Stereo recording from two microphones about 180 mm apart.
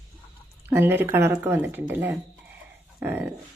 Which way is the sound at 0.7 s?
10° right (ahead or behind).